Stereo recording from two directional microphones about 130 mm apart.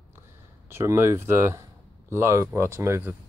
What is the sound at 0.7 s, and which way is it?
Speech, 20° right (ahead or behind).